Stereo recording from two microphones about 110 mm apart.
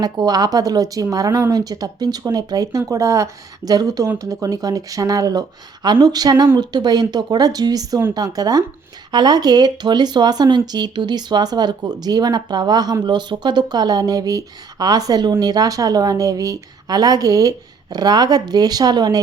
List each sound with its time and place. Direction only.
0.0 s speech: 35° right (ahead or behind)